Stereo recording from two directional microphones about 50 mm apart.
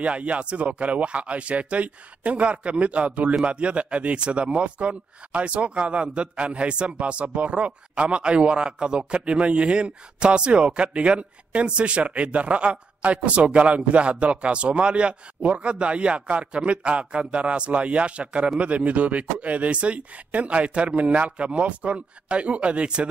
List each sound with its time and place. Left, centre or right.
0.0 s a man's voice: right